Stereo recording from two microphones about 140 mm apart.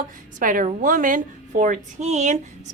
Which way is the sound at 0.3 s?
75° right (ahead or behind).